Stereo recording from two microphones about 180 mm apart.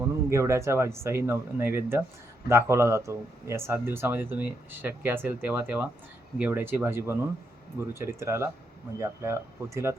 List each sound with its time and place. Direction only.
0.0 s speech: 15° right (ahead or behind)